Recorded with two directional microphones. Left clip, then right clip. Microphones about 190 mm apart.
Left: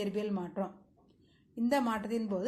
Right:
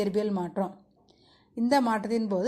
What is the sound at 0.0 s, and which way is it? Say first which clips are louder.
A woman's voice: right 8 dB; 50° right (ahead or behind).